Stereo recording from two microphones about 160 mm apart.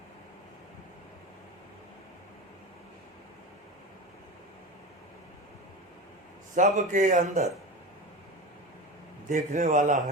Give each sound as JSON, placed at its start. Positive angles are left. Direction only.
{"t": 6.6, "sound": "speech", "side_deg": -50}
{"t": 9.3, "sound": "speech", "side_deg": -50}